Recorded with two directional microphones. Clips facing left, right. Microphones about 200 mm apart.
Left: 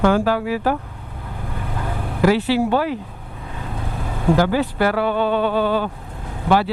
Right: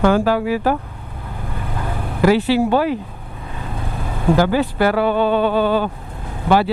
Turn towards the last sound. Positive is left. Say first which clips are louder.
# right 2 dB
turn(degrees=-10)  # may be behind; listen again after turning